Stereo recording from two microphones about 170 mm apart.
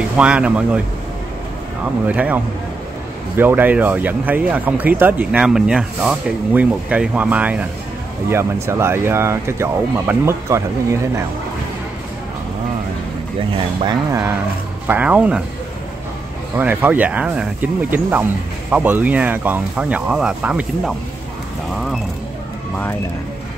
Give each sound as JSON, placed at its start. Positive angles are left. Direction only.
{"t": 0.2, "sound": "speech", "side_deg": -5}
{"t": 2.0, "sound": "speech", "side_deg": -10}
{"t": 14.9, "sound": "speech", "side_deg": -10}
{"t": 16.5, "sound": "speech", "side_deg": -10}